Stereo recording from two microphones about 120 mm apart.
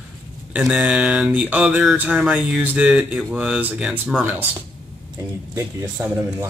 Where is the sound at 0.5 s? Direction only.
5° right (ahead or behind).